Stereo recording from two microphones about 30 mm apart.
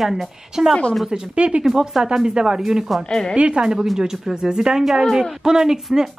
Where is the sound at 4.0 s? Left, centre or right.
Centre.